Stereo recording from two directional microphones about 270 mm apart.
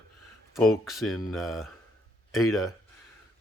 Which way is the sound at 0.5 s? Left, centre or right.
Centre.